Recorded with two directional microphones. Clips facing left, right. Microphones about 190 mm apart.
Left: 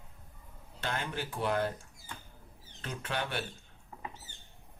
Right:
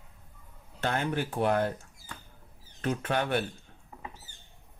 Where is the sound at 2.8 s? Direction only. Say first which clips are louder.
Right 8 dB; 55° right (ahead or behind).